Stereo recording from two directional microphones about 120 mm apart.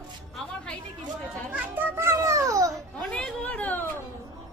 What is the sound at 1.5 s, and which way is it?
Children playing, 15° right (ahead or behind).